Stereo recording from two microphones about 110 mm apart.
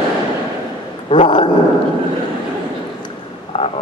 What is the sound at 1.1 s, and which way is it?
Speech, 45° left (ahead or behind).